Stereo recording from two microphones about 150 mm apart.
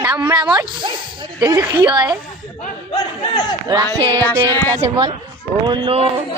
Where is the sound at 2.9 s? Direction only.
30° left (ahead or behind).